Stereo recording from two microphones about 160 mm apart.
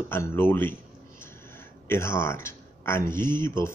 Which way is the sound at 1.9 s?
15° left (ahead or behind).